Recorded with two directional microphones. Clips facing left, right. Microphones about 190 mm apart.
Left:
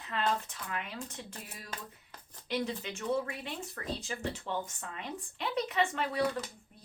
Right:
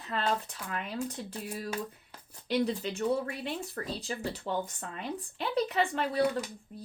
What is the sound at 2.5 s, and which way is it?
Speech, 35° right (ahead or behind).